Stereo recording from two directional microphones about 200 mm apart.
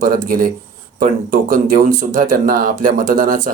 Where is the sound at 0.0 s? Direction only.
45° right (ahead or behind).